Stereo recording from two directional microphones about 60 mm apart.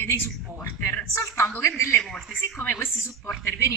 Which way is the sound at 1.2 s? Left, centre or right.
Left.